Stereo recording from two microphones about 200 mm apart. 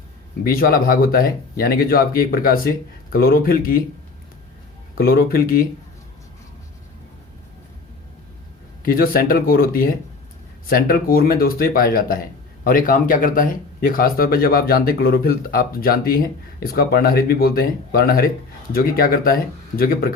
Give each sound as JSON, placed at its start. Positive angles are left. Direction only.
{"t": 0.4, "sound": "speech", "side_deg": 45}
{"t": 4.9, "sound": "speech", "side_deg": 50}
{"t": 8.8, "sound": "speech", "side_deg": 45}